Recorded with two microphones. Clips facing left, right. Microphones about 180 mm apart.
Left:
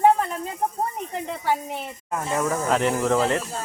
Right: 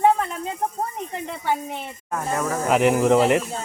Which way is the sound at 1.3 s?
5° left (ahead or behind).